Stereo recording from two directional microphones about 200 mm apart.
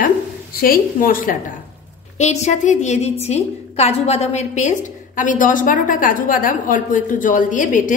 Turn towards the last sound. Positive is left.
turn(degrees=40)  # may be behind; listen again after turning